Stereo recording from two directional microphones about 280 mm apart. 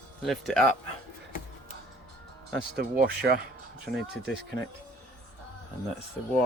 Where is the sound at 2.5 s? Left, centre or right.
Right.